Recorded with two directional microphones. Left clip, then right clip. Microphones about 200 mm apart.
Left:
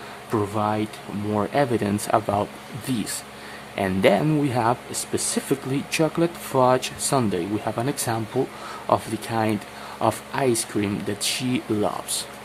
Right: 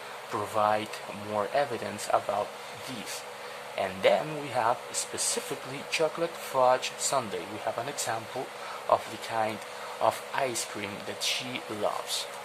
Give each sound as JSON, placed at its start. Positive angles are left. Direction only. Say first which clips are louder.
{"t": 0.5, "sound": "speech", "louder": "right 2 dB", "side_deg": 5}
{"t": 1.4, "sound": "speech", "louder": "left 6 dB", "side_deg": 15}